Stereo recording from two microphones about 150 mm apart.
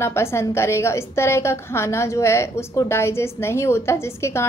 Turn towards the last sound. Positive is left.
turn(degrees=20)  # may be behind; listen again after turning